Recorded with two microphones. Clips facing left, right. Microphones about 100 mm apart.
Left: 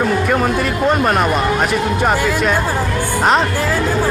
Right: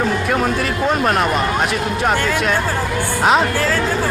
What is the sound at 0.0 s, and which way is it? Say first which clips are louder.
A woman's voice: left 2 dB; centre (ahead or behind).